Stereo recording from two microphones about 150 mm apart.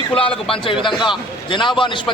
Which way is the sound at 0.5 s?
35° left (ahead or behind).